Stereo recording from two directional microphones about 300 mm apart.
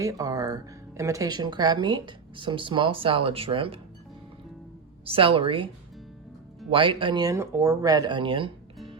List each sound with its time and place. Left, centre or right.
0.0 s speech: centre
5.0 s speech: centre